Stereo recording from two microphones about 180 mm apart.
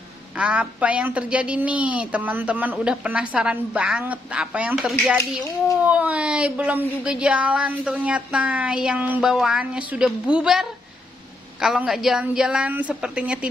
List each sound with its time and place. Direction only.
0.4 s a woman's voice: 5° right (ahead or behind)
5.1 s speech: 15° left (ahead or behind)
5.8 s a woman's voice: 5° right (ahead or behind)